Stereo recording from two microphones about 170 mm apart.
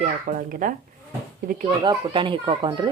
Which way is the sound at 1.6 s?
25° right (ahead or behind).